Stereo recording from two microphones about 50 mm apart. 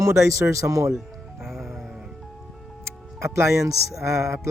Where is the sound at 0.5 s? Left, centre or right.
Right.